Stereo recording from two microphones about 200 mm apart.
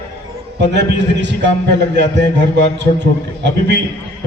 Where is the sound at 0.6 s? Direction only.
60° right (ahead or behind).